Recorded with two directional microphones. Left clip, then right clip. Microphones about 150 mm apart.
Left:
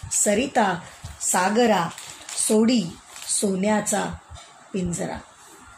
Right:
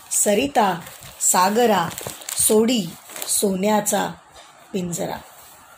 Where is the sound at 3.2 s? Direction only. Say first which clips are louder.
Right 3 dB; 45° right (ahead or behind).